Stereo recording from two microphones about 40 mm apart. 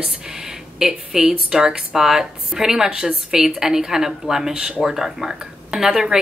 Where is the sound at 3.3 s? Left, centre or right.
Centre.